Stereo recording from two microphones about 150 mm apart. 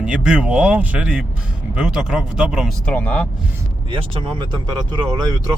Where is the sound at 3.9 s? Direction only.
35° right (ahead or behind).